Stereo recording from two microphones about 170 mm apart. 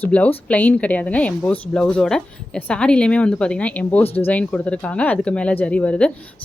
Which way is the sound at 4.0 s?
35° left (ahead or behind).